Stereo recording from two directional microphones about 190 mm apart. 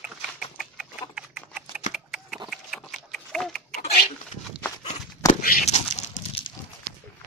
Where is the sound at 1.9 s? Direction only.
5° right (ahead or behind).